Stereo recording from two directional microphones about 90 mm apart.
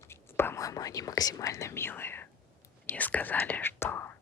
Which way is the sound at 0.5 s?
40° left (ahead or behind).